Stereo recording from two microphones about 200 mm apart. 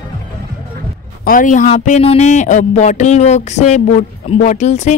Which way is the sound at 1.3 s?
40° left (ahead or behind).